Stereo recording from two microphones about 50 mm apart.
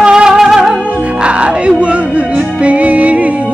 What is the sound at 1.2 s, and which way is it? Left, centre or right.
Music, right.